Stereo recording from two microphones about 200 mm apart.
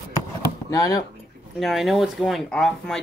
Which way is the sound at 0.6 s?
20° left (ahead or behind).